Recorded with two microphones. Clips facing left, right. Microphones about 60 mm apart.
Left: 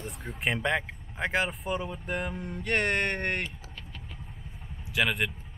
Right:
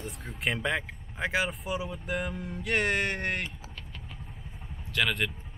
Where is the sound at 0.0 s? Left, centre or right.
Centre.